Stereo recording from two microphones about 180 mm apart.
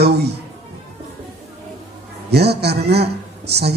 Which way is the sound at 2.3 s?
65° right (ahead or behind).